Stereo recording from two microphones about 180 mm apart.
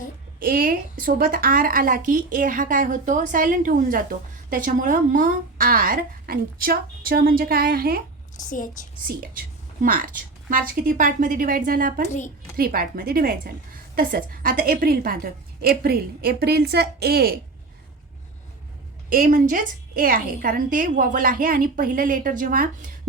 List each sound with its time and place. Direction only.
0.3 s a woman's voice: 55° right (ahead or behind)
8.4 s a woman's voice: 45° left (ahead or behind)
9.8 s a woman's voice: 50° right (ahead or behind)
12.0 s a woman's voice: 40° left (ahead or behind)
12.5 s a woman's voice: 55° right (ahead or behind)
19.1 s a woman's voice: 50° right (ahead or behind)